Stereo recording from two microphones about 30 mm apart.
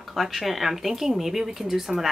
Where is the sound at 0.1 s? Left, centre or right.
Centre.